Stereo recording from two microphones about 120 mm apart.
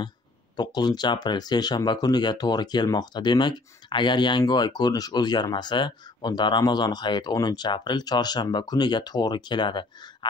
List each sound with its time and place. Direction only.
0.6 s speech: 35° left (ahead or behind)